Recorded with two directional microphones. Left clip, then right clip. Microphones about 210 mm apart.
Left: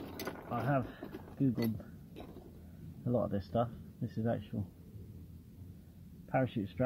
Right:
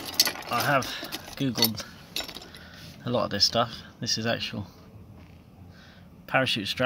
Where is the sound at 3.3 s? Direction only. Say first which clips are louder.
Right 11 dB; centre (ahead or behind).